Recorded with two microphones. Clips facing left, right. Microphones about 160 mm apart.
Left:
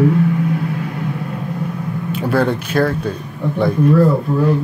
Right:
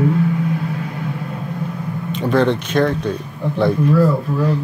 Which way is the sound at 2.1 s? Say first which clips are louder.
Right 1 dB; 5° left (ahead or behind).